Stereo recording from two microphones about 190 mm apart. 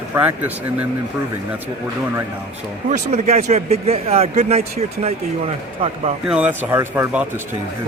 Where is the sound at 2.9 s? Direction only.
35° right (ahead or behind).